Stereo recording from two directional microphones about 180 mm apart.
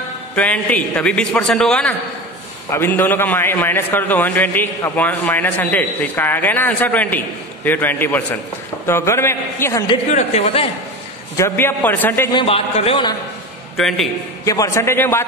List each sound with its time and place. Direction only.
0.4 s a man's voice: 10° left (ahead or behind)
10.1 s speech: 35° left (ahead or behind)
11.3 s a man's voice: 15° left (ahead or behind)
12.3 s a man's voice: 30° left (ahead or behind)
13.7 s a man's voice: centre (ahead or behind)
14.4 s a man's voice: 20° left (ahead or behind)